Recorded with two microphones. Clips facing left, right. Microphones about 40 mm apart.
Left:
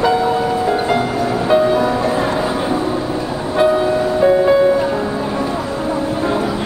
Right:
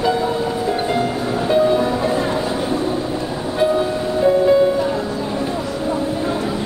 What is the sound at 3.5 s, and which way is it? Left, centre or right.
Music, left.